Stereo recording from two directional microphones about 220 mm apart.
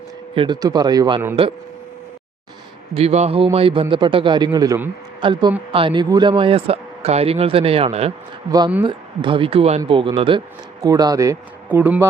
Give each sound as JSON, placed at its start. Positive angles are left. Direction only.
{"t": 0.3, "sound": "speech", "side_deg": -20}
{"t": 2.9, "sound": "speech", "side_deg": -30}